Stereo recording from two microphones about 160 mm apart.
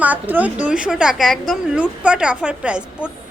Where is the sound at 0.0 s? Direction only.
10° right (ahead or behind).